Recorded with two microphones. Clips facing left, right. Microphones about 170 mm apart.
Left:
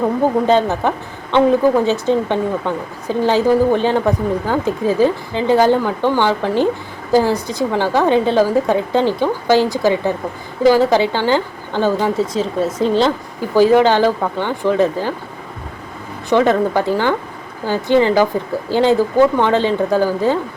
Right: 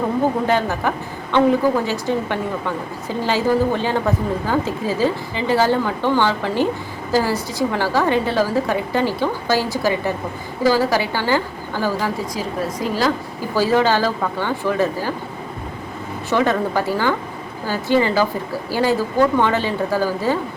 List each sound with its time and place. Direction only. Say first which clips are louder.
0.4 s a woman's voice: left 5 dB; 20° left (ahead or behind)
16.3 s a woman's voice: left 5 dB; 20° left (ahead or behind)